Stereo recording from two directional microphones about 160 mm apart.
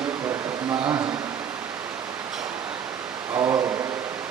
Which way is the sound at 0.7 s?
25° right (ahead or behind).